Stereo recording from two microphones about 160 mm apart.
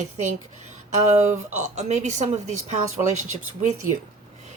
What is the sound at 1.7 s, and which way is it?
Speech, 45° right (ahead or behind).